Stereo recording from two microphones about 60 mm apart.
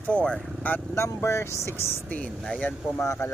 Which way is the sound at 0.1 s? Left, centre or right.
Centre.